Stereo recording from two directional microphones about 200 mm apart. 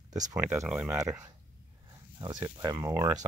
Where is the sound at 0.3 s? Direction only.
5° right (ahead or behind).